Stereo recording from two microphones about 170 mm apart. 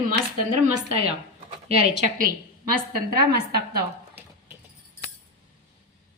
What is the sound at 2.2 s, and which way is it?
Speech, 55° right (ahead or behind).